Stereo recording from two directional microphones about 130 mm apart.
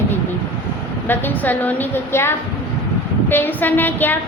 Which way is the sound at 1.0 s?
15° left (ahead or behind).